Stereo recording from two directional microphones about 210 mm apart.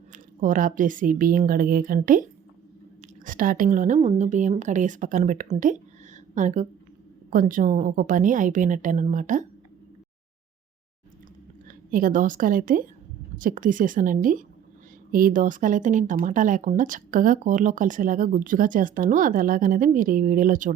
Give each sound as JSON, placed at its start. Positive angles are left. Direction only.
{"t": 0.1, "sound": "speech", "side_deg": -40}
{"t": 11.9, "sound": "speech", "side_deg": -40}